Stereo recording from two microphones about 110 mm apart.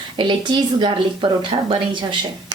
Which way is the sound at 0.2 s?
45° right (ahead or behind).